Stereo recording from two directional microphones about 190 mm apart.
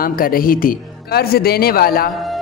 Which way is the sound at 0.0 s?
50° left (ahead or behind).